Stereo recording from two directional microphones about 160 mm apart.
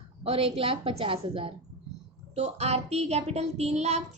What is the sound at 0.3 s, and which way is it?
A woman's voice, 35° right (ahead or behind).